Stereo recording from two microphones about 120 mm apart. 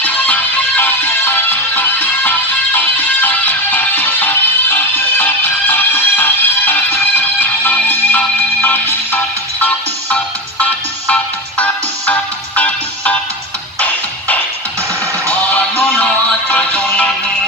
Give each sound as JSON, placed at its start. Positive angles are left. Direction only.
{"t": 0.0, "sound": "music", "side_deg": 15}